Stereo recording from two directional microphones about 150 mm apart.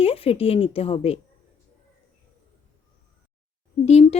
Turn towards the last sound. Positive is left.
turn(degrees=45)  # may be behind; listen again after turning